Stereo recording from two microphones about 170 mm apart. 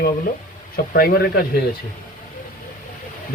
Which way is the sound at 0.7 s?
60° left (ahead or behind).